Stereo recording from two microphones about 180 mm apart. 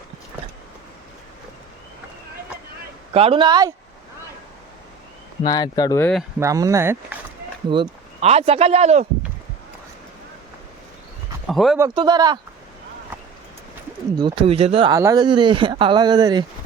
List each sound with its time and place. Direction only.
3.1 s speech: 30° right (ahead or behind)
5.5 s speech: 20° left (ahead or behind)
6.0 s speech: 5° left (ahead or behind)
6.4 s speech: 20° right (ahead or behind)
7.7 s speech: 30° right (ahead or behind)
11.4 s speech: centre (ahead or behind)
11.9 s speech: 25° right (ahead or behind)
14.2 s speech: 25° right (ahead or behind)
14.9 s speech: 20° right (ahead or behind)